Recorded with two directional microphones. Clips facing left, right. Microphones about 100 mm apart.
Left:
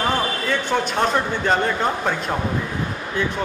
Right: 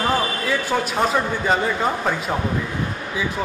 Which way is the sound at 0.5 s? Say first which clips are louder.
Even; 5° right (ahead or behind).